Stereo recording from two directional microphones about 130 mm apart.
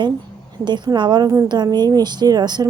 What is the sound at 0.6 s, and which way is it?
Speech, 35° right (ahead or behind).